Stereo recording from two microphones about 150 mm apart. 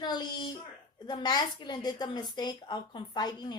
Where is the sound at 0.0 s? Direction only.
30° left (ahead or behind).